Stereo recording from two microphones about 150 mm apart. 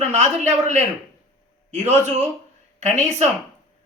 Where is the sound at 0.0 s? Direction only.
50° right (ahead or behind).